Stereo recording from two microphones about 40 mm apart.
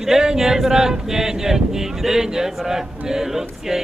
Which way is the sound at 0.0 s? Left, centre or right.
Centre.